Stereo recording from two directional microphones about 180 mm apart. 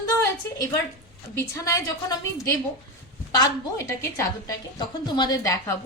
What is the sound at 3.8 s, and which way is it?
A woman's voice, 15° left (ahead or behind).